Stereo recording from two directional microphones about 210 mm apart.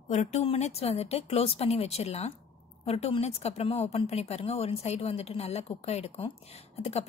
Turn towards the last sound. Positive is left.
turn(degrees=30)  # may be behind; listen again after turning